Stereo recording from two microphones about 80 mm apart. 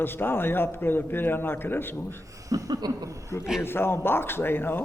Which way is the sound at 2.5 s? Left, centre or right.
Right.